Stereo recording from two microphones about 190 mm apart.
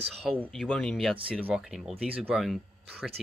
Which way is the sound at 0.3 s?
Centre (ahead or behind).